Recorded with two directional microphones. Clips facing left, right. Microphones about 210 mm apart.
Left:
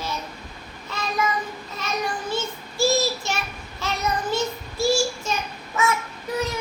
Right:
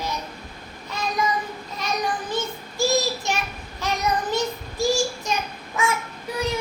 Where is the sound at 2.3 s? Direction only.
15° right (ahead or behind).